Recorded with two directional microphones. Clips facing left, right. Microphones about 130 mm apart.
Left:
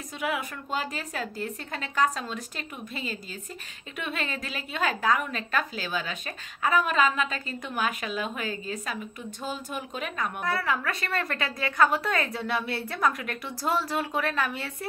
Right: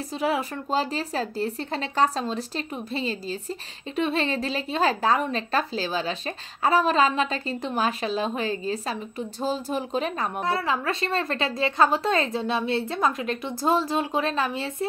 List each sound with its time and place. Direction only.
0.2 s speech: 30° right (ahead or behind)